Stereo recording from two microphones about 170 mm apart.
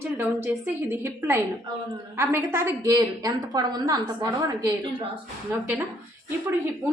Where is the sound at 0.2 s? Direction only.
10° right (ahead or behind).